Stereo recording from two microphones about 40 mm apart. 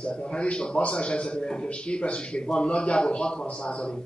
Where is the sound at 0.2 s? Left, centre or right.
Left.